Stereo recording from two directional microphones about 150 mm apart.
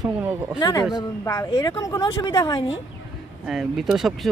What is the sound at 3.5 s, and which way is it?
Speech, centre (ahead or behind).